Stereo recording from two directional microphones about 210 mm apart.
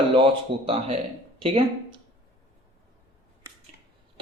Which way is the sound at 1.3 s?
25° right (ahead or behind).